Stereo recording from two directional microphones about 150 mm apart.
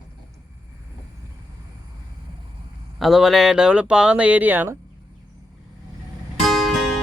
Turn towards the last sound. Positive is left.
turn(degrees=0)  # may be behind; listen again after turning